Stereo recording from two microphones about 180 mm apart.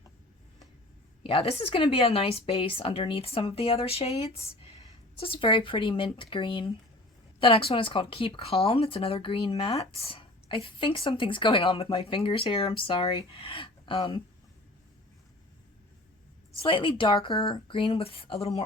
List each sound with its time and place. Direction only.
1.2 s a woman's voice: 30° left (ahead or behind)
16.6 s a woman's voice: 30° left (ahead or behind)